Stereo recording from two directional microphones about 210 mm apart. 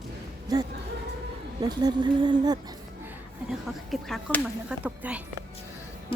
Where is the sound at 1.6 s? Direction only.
20° right (ahead or behind).